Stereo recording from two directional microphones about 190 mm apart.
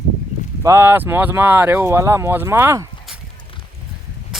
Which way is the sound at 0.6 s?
15° right (ahead or behind).